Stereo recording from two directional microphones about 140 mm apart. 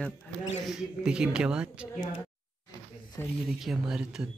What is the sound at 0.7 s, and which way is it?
Speech, 5° right (ahead or behind).